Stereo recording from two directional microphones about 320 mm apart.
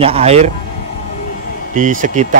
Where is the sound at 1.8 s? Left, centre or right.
Right.